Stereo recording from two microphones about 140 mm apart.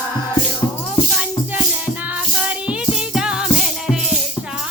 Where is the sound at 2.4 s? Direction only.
10° right (ahead or behind).